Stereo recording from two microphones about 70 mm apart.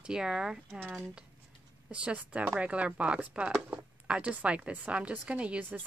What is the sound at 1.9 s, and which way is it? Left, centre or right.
Speech, centre.